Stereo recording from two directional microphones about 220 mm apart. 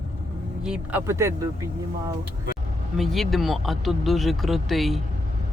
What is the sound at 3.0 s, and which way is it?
Speech, centre (ahead or behind).